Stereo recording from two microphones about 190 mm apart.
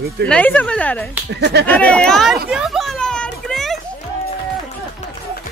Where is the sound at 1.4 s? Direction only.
65° right (ahead or behind).